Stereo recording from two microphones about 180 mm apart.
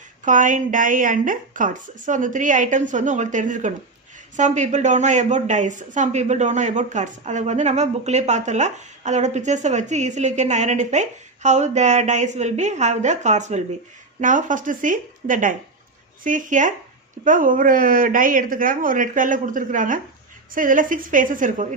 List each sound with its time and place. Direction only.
0.3 s a woman's voice: 45° right (ahead or behind)